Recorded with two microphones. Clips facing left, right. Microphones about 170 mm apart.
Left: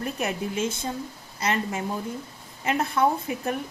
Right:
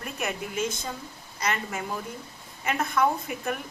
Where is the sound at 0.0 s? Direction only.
35° left (ahead or behind).